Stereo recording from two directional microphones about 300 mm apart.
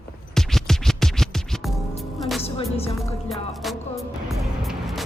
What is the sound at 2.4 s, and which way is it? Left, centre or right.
Music, centre.